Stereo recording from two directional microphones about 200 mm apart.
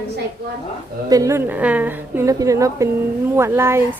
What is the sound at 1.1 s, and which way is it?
A woman's voice, 15° right (ahead or behind).